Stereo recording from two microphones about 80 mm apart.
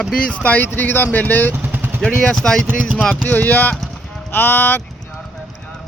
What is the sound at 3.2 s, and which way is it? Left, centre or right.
Speech, left.